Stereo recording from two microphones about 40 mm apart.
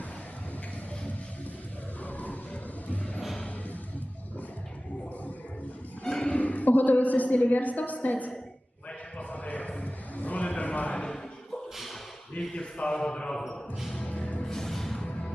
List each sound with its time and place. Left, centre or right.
2.0 s music: left
3.2 s music: centre
6.1 s music: centre
6.3 s a sound: left
9.3 s a sound: left
12.4 s speech: left
14.2 s music: left
14.4 s music: centre